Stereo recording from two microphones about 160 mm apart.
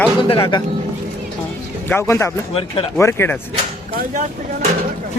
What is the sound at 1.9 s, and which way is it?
Speech, 15° left (ahead or behind).